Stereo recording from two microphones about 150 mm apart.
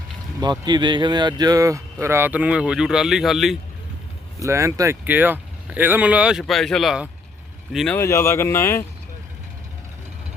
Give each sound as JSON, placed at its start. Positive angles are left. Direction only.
{"t": 0.6, "sound": "speech", "side_deg": -30}
{"t": 4.4, "sound": "speech", "side_deg": -20}
{"t": 7.9, "sound": "speech", "side_deg": 15}